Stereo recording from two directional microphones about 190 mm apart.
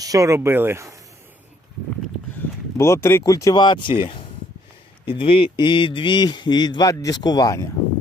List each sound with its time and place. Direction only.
0.0 s speech: 15° right (ahead or behind)
2.7 s speech: 15° left (ahead or behind)